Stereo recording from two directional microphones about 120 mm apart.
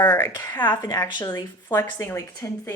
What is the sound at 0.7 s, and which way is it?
A woman's voice, 30° left (ahead or behind).